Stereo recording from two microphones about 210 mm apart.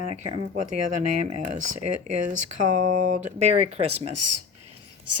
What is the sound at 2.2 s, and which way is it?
Speech, 35° right (ahead or behind).